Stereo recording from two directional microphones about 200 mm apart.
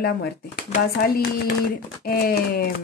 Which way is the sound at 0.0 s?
55° left (ahead or behind).